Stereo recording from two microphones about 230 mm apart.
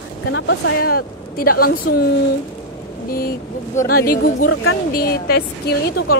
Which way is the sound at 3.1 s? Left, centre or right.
Left.